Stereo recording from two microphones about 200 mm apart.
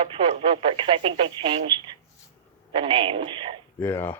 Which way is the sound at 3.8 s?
10° left (ahead or behind).